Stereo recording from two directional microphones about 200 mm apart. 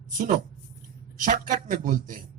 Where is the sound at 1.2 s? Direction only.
40° right (ahead or behind).